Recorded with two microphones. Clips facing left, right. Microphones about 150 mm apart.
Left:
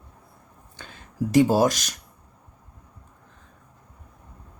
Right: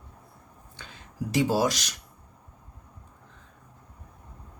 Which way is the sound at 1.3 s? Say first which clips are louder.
Left 6 dB; 50° left (ahead or behind).